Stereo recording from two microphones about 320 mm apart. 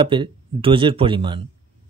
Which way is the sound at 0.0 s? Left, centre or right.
Centre.